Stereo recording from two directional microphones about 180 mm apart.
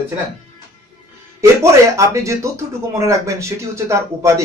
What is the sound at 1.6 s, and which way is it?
Speech, 15° right (ahead or behind).